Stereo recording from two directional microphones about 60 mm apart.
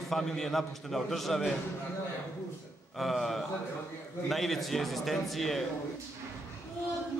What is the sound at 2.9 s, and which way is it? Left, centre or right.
A man's voice, centre.